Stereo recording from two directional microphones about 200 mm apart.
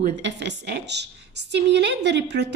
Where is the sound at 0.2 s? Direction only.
60° right (ahead or behind).